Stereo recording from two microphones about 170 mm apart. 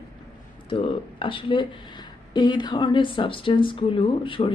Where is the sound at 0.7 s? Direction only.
30° left (ahead or behind).